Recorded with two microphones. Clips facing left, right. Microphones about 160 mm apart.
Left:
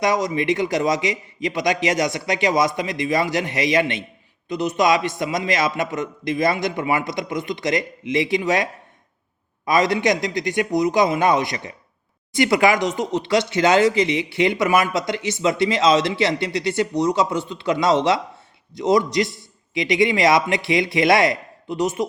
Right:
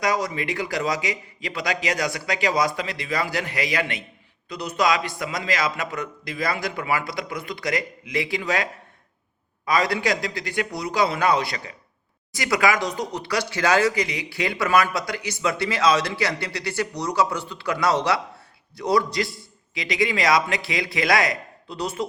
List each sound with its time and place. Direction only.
0.0 s speech: 20° left (ahead or behind)